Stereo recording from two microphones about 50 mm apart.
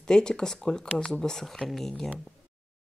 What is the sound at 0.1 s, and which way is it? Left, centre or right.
Speech, centre.